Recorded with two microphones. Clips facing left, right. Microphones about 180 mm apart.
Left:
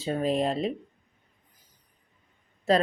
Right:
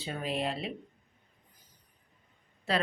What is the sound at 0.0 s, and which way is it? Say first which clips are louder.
Speech: left 8 dB; 40° left (ahead or behind).